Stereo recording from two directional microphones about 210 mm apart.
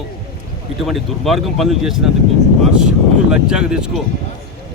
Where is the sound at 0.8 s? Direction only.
Centre (ahead or behind).